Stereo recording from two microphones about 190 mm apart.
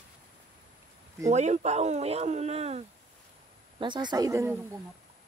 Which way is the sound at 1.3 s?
35° right (ahead or behind).